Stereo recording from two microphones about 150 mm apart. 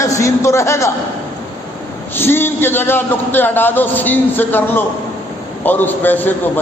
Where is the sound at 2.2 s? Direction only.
15° left (ahead or behind).